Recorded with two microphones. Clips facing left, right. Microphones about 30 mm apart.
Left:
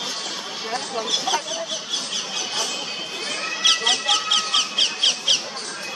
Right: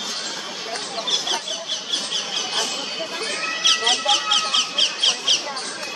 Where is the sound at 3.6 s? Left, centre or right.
Centre.